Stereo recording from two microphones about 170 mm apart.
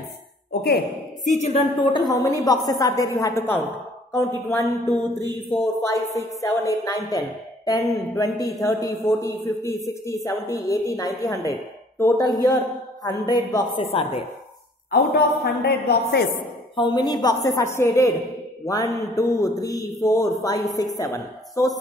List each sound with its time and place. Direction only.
0.5 s a sound: 70° left (ahead or behind)
1.2 s a woman's voice: 45° left (ahead or behind)
15.1 s a woman's voice: 70° left (ahead or behind)
16.7 s a woman's voice: 25° left (ahead or behind)